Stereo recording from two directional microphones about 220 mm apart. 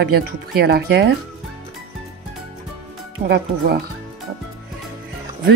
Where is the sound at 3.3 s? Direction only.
50° right (ahead or behind).